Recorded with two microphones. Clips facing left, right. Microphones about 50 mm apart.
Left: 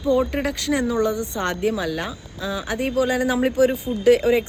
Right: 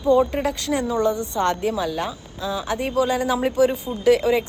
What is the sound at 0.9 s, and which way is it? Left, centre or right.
Speech, right.